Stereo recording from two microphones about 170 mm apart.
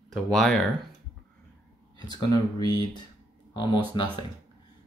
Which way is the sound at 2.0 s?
25° left (ahead or behind).